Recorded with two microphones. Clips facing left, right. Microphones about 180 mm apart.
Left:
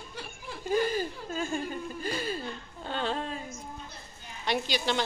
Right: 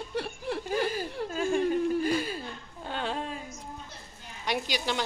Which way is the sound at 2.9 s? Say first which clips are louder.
Left 1 dB; 5° right (ahead or behind).